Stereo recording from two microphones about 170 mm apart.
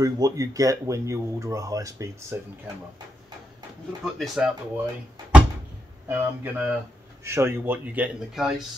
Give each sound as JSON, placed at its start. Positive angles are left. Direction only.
{"t": 0.0, "sound": "a man's voice", "side_deg": -20}
{"t": 4.0, "sound": "speech", "side_deg": 0}
{"t": 6.0, "sound": "a man's voice", "side_deg": -10}